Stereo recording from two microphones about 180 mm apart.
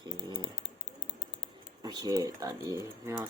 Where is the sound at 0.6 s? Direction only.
65° left (ahead or behind).